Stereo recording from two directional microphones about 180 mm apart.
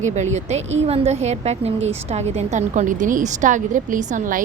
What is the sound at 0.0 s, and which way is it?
A woman's voice, 40° right (ahead or behind).